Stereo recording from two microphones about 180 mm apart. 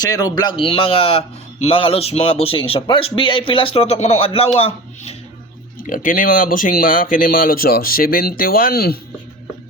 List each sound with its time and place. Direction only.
0.0 s a man's voice: 20° left (ahead or behind)
5.8 s speech: 45° left (ahead or behind)